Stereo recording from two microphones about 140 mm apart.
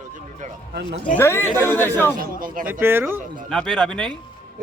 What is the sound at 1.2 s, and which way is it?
Speech, 15° left (ahead or behind).